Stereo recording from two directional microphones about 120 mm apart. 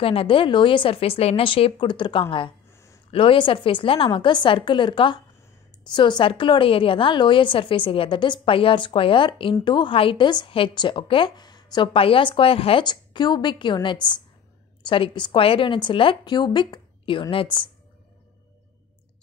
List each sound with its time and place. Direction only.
0.0 s a woman's voice: 50° left (ahead or behind)
2.7 s a sound: 25° left (ahead or behind)
3.1 s a woman's voice: 50° left (ahead or behind)
11.9 s a woman's voice: 50° left (ahead or behind)